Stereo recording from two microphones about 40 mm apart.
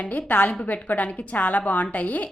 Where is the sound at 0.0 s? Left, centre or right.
Left.